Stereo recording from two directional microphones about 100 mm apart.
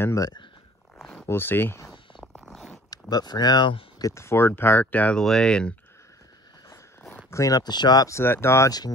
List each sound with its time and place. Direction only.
0.0 s speech: 35° left (ahead or behind)
1.2 s speech: 25° left (ahead or behind)
1.9 s zipper: centre (ahead or behind)
2.9 s speech: 45° left (ahead or behind)
4.0 s speech: 30° left (ahead or behind); by 5.8 s 10° left (ahead or behind)
6.7 s a sound: 20° left (ahead or behind); by 8.1 s 45° left (ahead or behind)
8.1 s speech: 25° left (ahead or behind)
8.6 s speech: 40° left (ahead or behind)